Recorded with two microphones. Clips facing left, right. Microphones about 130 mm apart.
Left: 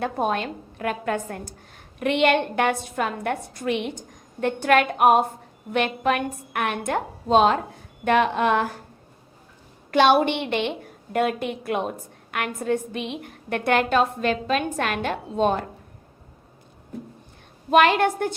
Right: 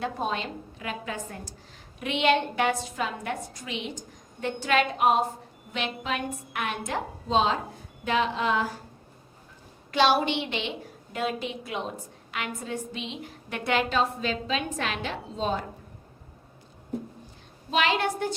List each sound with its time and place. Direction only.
0.0 s a woman's voice: 55° left (ahead or behind)
9.9 s a woman's voice: 55° left (ahead or behind)
17.7 s a woman's voice: 55° left (ahead or behind)